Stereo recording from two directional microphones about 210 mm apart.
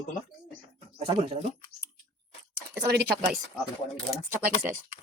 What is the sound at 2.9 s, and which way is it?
Speech, 50° right (ahead or behind).